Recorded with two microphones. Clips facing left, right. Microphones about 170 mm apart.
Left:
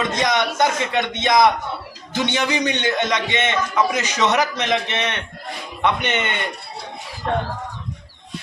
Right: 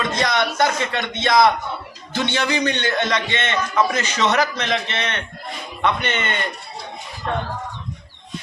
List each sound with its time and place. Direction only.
0.1 s a man's voice: 15° left (ahead or behind)